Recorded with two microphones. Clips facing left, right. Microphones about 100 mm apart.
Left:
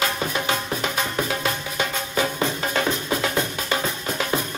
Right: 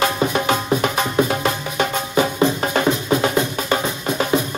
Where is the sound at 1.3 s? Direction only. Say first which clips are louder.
Right 5 dB; 50° right (ahead or behind).